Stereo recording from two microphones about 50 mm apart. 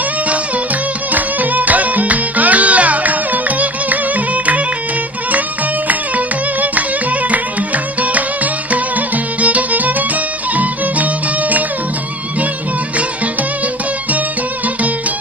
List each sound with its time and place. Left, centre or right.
1.1 s music: right
5.9 s music: right
8.7 s music: right